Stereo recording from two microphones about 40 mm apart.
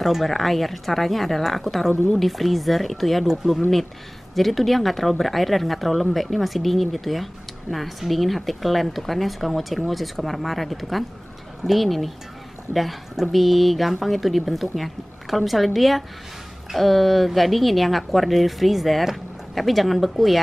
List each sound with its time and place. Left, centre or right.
0.0 s a woman's voice: centre
13.3 s a woman's voice: centre